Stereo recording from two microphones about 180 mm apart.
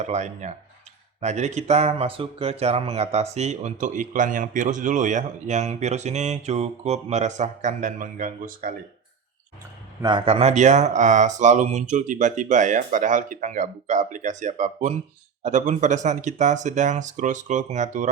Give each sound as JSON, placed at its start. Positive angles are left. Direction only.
{"t": 0.0, "sound": "speech", "side_deg": -40}
{"t": 10.0, "sound": "speech", "side_deg": -25}